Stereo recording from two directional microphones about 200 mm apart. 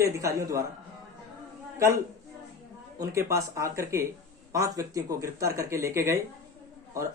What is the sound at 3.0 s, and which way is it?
Speech, 15° right (ahead or behind).